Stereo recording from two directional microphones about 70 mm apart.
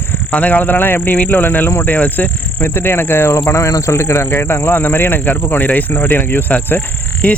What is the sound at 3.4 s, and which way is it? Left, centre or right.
Speech, left.